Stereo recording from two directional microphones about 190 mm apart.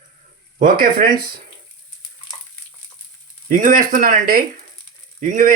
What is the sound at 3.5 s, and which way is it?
Speech, 45° right (ahead or behind).